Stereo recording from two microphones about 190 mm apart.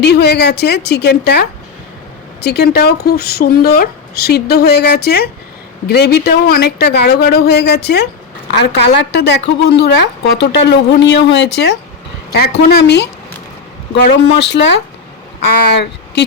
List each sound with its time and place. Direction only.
0.0 s speech: 60° left (ahead or behind)